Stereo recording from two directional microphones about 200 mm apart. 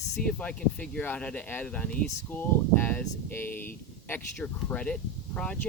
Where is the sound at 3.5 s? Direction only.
45° left (ahead or behind).